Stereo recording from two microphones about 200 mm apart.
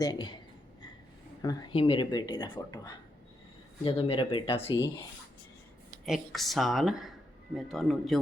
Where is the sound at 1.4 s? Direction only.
20° left (ahead or behind).